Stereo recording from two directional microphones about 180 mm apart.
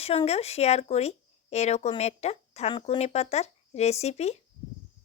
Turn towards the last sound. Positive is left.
turn(degrees=35)  # may be behind; listen again after turning